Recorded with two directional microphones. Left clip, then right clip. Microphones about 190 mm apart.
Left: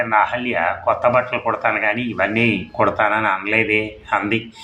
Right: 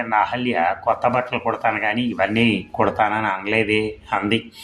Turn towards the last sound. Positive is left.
turn(degrees=-35)  # may be behind; listen again after turning